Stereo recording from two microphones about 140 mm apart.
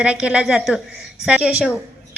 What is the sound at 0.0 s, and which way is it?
A woman's voice, 5° right (ahead or behind).